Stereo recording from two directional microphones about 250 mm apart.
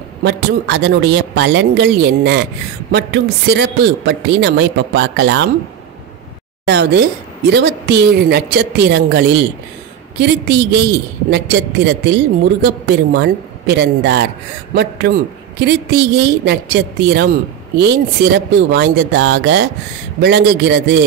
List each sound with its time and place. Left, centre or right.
0.2 s a man's voice: right
6.6 s a woman's voice: right